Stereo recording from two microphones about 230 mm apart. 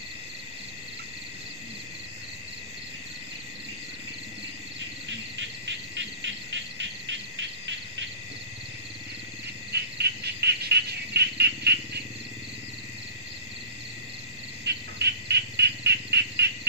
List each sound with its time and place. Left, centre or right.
5.7 s insect: right
9.7 s bird: right
14.6 s bird: right